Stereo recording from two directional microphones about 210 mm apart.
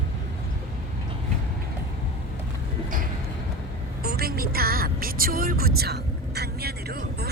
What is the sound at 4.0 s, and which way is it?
Music, 45° right (ahead or behind).